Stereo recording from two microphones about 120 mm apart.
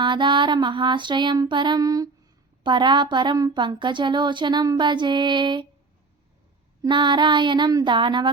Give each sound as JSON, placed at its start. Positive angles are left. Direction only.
{"t": 0.0, "sound": "speech", "side_deg": -40}
{"t": 6.8, "sound": "speech", "side_deg": -40}